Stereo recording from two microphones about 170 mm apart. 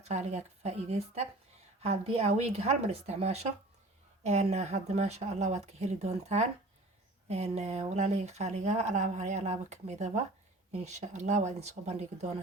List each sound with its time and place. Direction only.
0.0 s speech: 40° right (ahead or behind)